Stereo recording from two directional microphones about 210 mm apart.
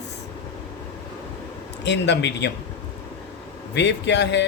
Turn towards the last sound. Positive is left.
turn(degrees=55)  # may be behind; listen again after turning